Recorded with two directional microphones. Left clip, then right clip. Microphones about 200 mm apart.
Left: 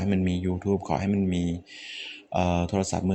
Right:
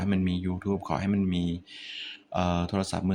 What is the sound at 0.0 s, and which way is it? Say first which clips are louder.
Speech: left 3 dB; 10° left (ahead or behind).